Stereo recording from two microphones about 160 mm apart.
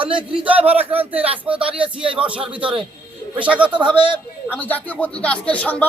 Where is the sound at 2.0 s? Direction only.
35° right (ahead or behind).